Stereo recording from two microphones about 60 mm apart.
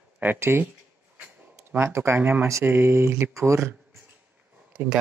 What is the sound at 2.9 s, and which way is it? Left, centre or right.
Speech, right.